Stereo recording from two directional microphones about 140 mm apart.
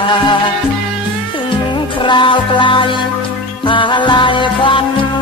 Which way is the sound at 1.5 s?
35° left (ahead or behind).